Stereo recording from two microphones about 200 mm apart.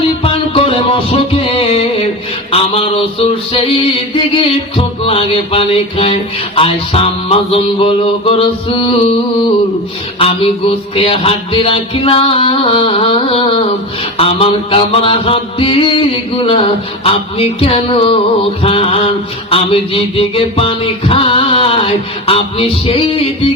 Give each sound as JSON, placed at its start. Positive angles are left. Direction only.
{"t": 0.2, "sound": "music", "side_deg": 25}
{"t": 2.5, "sound": "mantra", "side_deg": 30}
{"t": 10.2, "sound": "mantra", "side_deg": 30}